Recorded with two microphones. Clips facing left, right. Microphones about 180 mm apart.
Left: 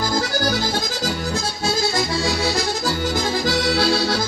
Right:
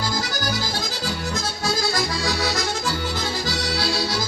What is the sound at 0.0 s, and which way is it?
Accordion, 55° left (ahead or behind).